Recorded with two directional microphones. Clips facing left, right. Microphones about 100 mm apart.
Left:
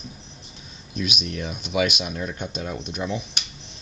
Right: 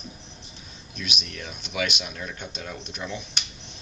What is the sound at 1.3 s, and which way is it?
Speech, 20° left (ahead or behind).